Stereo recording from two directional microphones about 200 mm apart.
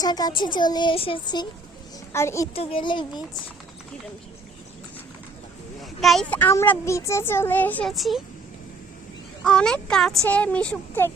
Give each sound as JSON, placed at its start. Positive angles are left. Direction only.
{"t": 0.0, "sound": "a woman's voice", "side_deg": 20}
{"t": 2.6, "sound": "a woman's voice", "side_deg": 25}
{"t": 5.8, "sound": "speech", "side_deg": 0}
{"t": 9.4, "sound": "speech", "side_deg": 5}